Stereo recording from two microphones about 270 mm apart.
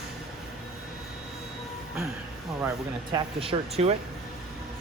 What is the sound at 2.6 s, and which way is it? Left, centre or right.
Speech, centre.